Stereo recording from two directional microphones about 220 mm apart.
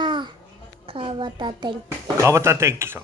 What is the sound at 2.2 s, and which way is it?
Child singing, 15° right (ahead or behind).